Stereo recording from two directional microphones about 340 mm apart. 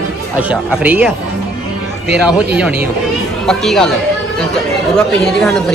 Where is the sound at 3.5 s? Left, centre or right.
Centre.